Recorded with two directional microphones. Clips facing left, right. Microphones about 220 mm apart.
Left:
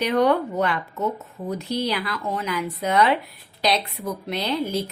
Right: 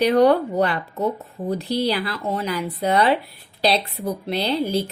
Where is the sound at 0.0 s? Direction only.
35° right (ahead or behind).